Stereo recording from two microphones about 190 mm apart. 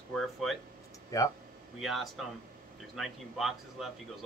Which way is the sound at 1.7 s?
Centre (ahead or behind).